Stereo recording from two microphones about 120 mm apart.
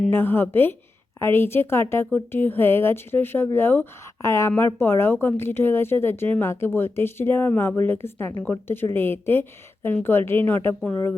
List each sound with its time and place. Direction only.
0.1 s speech: 20° left (ahead or behind)